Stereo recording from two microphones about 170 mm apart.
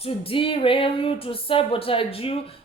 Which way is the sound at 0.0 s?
35° left (ahead or behind).